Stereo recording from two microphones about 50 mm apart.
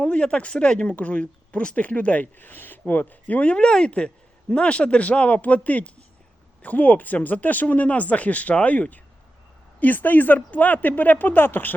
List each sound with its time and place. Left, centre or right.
0.0 s speech: left